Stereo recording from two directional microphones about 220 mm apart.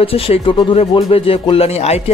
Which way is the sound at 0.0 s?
25° left (ahead or behind).